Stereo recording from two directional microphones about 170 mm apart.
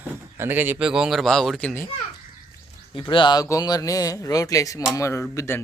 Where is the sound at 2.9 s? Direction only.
30° left (ahead or behind).